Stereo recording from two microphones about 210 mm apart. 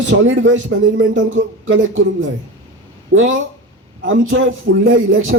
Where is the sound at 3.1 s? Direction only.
65° right (ahead or behind).